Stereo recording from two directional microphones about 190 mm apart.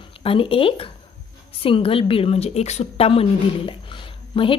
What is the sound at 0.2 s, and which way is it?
A woman's voice, 30° left (ahead or behind).